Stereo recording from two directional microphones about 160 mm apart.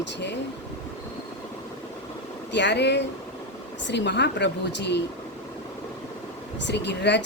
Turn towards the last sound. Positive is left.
turn(degrees=90)